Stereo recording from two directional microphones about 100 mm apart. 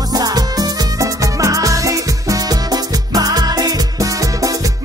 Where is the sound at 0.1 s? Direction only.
40° right (ahead or behind).